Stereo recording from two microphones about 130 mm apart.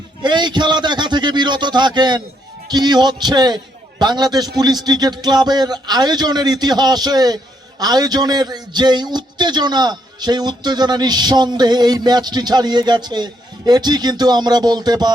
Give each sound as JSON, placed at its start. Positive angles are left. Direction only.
{"t": 0.2, "sound": "a man's voice", "side_deg": -35}